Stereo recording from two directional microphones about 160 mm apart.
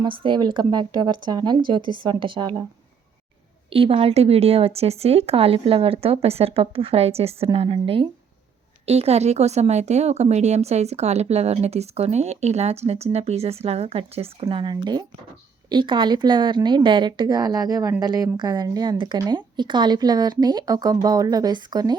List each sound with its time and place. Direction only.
0.0 s a woman's voice: 30° right (ahead or behind)
3.7 s a woman's voice: 35° right (ahead or behind)